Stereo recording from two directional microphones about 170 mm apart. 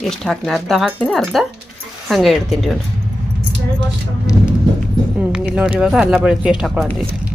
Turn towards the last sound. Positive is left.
turn(degrees=-5)  # may be behind; listen again after turning